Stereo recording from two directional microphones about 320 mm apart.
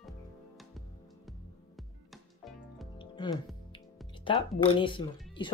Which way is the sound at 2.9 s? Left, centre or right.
Centre.